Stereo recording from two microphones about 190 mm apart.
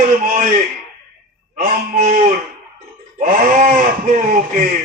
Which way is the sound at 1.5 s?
45° right (ahead or behind).